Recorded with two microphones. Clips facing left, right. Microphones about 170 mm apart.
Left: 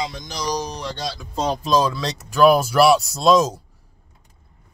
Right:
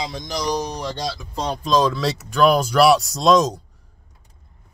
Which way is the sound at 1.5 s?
10° left (ahead or behind).